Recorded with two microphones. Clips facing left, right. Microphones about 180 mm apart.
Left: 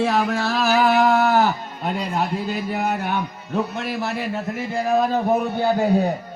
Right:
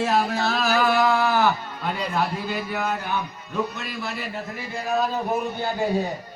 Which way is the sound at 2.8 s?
60° left (ahead or behind).